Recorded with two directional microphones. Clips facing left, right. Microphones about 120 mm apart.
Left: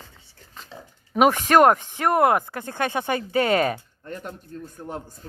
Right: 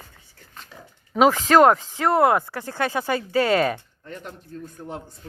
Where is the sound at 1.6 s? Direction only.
15° left (ahead or behind).